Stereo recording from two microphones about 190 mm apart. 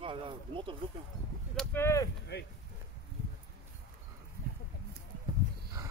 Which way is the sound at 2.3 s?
60° left (ahead or behind).